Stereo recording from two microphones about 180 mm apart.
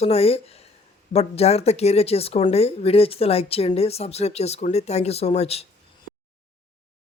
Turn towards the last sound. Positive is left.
turn(degrees=35)  # may be behind; listen again after turning